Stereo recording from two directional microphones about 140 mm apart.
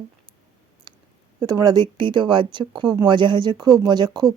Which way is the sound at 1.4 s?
25° right (ahead or behind).